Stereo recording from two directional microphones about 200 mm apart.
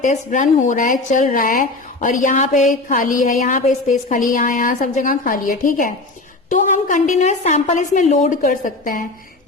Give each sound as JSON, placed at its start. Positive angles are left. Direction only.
{"t": 0.0, "sound": "a woman's voice", "side_deg": 40}